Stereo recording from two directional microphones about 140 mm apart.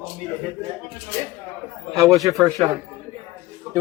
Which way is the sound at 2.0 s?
25° right (ahead or behind).